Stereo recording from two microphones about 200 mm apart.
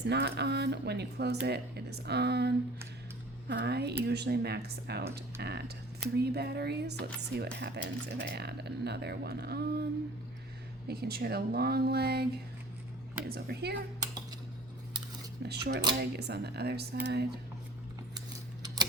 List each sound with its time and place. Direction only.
0.1 s speech: 55° right (ahead or behind)
3.5 s speech: 55° right (ahead or behind)
10.8 s speech: 50° right (ahead or behind)
15.4 s speech: 55° right (ahead or behind)